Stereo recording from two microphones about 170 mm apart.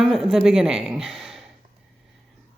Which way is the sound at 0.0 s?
Centre (ahead or behind).